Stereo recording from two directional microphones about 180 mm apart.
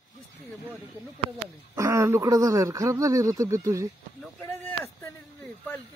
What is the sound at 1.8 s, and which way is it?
Speech, 15° right (ahead or behind).